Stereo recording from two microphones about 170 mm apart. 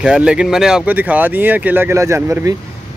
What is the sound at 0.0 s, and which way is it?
Speech, 5° right (ahead or behind).